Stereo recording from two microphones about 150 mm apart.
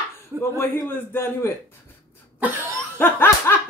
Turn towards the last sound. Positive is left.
turn(degrees=15)  # may be behind; listen again after turning